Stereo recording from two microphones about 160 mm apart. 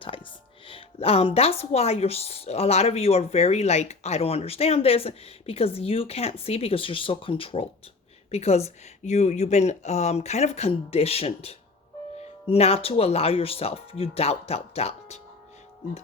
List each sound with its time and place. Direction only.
0.0 s music: 35° left (ahead or behind)
0.7 s speech: 35° left (ahead or behind)